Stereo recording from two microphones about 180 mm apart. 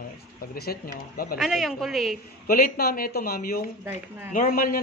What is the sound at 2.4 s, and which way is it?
A man's voice, 55° left (ahead or behind).